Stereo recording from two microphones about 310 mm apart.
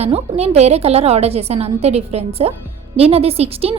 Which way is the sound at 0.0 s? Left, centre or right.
Centre.